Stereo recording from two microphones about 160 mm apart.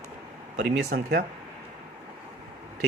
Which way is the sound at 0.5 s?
90° right.